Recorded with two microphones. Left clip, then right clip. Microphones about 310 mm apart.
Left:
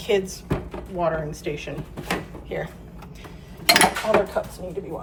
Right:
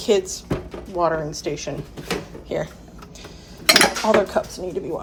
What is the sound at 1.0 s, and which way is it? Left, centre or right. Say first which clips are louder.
Speech: right 3 dB; centre.